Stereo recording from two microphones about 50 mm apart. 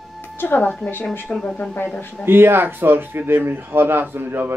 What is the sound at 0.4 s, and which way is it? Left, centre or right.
Speech, left.